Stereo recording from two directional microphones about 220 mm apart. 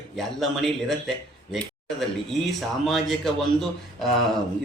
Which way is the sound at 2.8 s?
Centre (ahead or behind).